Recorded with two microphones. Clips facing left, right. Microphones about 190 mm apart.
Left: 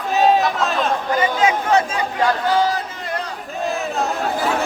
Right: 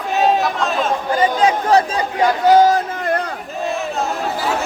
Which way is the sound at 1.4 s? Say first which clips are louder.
Right 3 dB; 35° right (ahead or behind).